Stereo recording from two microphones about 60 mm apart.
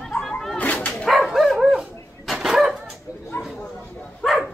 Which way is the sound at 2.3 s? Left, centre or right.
Centre.